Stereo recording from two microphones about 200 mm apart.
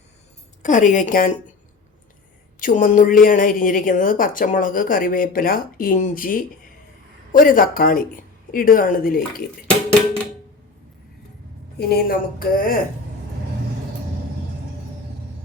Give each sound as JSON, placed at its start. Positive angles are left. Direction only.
{"t": 0.6, "sound": "a woman's voice", "side_deg": 40}
{"t": 2.6, "sound": "a woman's voice", "side_deg": 40}
{"t": 11.8, "sound": "a woman's voice", "side_deg": 50}